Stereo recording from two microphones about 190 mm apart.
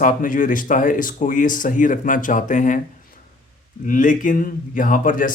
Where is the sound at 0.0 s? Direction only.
45° left (ahead or behind).